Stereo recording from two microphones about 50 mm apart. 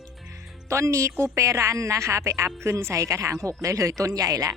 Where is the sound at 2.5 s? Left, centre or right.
Right.